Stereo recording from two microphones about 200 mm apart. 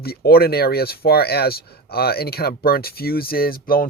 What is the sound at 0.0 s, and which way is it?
Speech, 50° left (ahead or behind).